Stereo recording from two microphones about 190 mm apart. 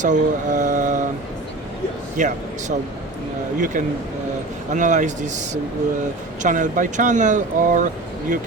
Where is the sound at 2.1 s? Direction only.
40° right (ahead or behind).